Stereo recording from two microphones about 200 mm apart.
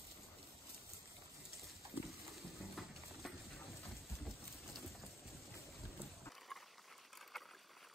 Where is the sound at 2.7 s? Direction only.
Centre (ahead or behind).